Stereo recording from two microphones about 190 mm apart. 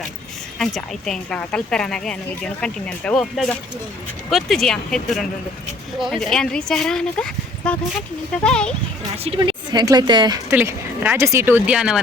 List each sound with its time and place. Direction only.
0.6 s a woman's voice: 5° left (ahead or behind)
9.1 s speech: 30° right (ahead or behind)
10.5 s a woman's voice: 10° right (ahead or behind)